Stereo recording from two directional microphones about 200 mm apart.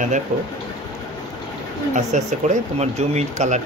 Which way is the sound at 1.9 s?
35° right (ahead or behind).